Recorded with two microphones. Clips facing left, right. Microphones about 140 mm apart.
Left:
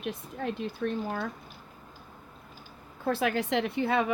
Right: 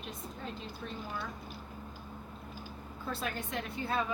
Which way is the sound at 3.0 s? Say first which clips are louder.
Left 10 dB; 70° left (ahead or behind).